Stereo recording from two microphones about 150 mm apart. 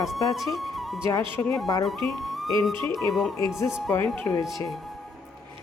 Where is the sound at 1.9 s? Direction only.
Centre (ahead or behind).